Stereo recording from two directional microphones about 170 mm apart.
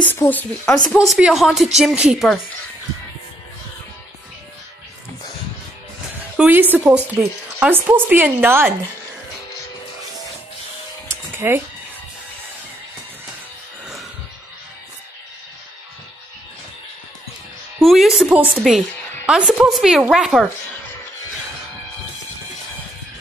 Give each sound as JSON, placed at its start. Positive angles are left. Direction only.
{"t": 0.0, "sound": "speech", "side_deg": 10}
{"t": 0.8, "sound": "speech", "side_deg": 0}
{"t": 6.3, "sound": "a woman's voice", "side_deg": -10}
{"t": 11.1, "sound": "a sound", "side_deg": -15}
{"t": 17.8, "sound": "speech", "side_deg": 0}